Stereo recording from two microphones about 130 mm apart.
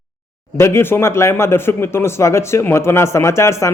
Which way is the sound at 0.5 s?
20° left (ahead or behind).